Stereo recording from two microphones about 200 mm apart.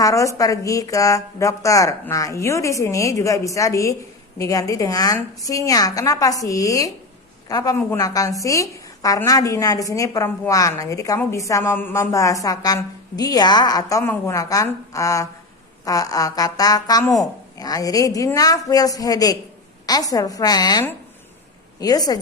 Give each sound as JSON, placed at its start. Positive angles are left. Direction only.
{"t": 0.0, "sound": "a woman's voice", "side_deg": 15}